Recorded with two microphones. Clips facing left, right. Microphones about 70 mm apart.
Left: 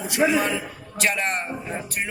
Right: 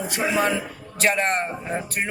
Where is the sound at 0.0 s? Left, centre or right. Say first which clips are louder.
Left 1 dB; right.